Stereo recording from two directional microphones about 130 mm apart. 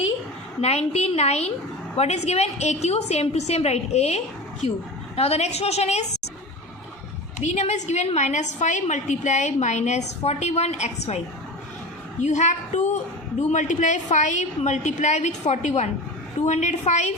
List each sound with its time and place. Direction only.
0.6 s a woman's voice: 55° left (ahead or behind)
7.3 s a woman's voice: 60° left (ahead or behind)
12.2 s a woman's voice: 65° left (ahead or behind)